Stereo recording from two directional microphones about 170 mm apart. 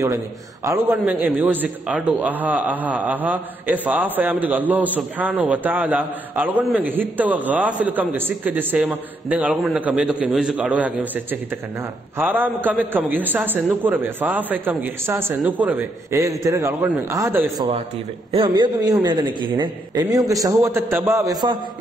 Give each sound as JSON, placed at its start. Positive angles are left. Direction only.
{"t": 0.7, "sound": "a man's voice", "side_deg": -15}
{"t": 18.3, "sound": "a man's voice", "side_deg": -30}